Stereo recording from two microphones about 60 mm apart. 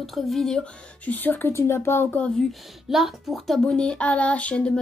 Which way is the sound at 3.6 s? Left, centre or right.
Centre.